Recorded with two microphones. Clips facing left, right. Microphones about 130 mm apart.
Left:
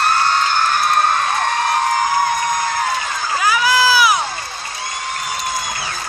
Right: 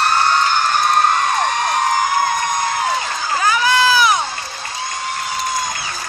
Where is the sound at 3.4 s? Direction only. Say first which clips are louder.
Even; 5° left (ahead or behind).